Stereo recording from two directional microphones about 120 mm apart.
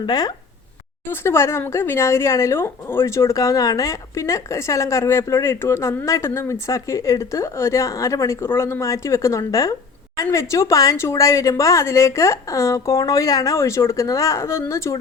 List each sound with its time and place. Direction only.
0.0 s speech: 35° left (ahead or behind)
1.1 s speech: 20° left (ahead or behind)